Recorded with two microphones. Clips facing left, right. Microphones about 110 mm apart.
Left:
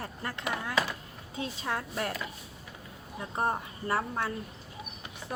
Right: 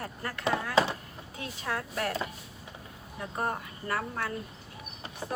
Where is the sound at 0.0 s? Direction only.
25° left (ahead or behind).